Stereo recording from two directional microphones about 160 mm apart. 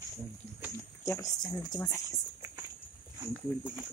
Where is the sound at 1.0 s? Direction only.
20° left (ahead or behind).